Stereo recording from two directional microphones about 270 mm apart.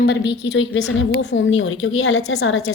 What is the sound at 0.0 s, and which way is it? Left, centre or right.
A woman's voice, left.